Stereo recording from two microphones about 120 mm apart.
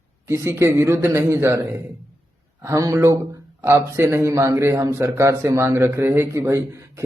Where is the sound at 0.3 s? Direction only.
20° right (ahead or behind).